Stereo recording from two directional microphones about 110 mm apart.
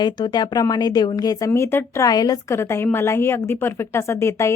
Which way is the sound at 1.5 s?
25° left (ahead or behind).